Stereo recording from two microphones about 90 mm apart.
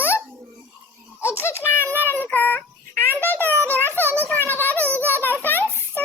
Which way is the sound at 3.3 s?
20° left (ahead or behind).